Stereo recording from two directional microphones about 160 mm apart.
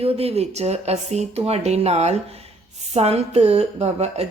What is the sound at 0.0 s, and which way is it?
A woman's voice, 40° right (ahead or behind).